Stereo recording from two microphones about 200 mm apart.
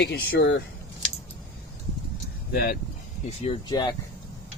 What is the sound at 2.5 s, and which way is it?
Speech, 50° left (ahead or behind).